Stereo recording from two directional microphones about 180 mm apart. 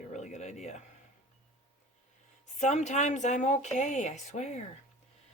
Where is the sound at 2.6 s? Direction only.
40° left (ahead or behind).